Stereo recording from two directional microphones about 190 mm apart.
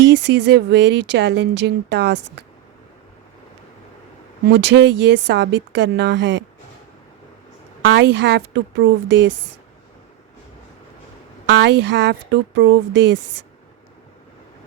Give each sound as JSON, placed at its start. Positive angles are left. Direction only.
{"t": 0.0, "sound": "speech", "side_deg": -70}
{"t": 4.4, "sound": "speech", "side_deg": -60}
{"t": 7.9, "sound": "speech", "side_deg": -65}
{"t": 11.5, "sound": "speech", "side_deg": -65}